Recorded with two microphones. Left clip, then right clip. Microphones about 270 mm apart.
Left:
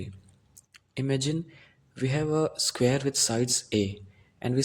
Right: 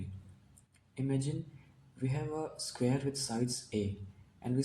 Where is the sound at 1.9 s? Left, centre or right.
Left.